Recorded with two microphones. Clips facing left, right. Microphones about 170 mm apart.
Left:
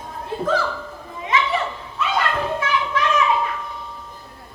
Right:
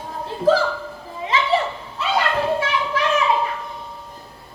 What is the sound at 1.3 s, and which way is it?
Children playing, 30° right (ahead or behind).